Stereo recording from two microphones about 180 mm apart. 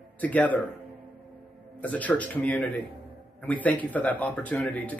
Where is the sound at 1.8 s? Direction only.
10° left (ahead or behind).